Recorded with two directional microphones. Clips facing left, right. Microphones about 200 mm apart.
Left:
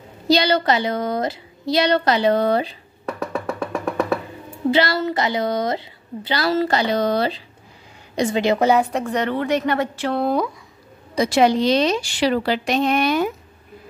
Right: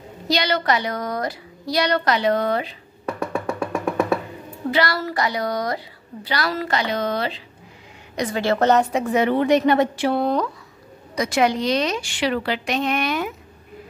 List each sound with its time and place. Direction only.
0.3 s a woman's voice: 30° left (ahead or behind)
3.1 s music: centre (ahead or behind)
4.6 s a woman's voice: 25° left (ahead or behind)
8.2 s a woman's voice: 20° left (ahead or behind)
8.8 s a woman's voice: 5° right (ahead or behind)
10.1 s a woman's voice: 5° left (ahead or behind)
11.1 s a woman's voice: 30° left (ahead or behind)